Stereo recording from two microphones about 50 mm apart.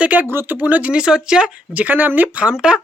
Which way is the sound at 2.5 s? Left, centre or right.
Centre.